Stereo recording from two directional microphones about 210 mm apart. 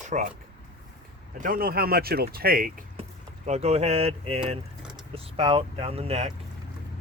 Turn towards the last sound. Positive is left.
turn(degrees=-30)  # may be behind; listen again after turning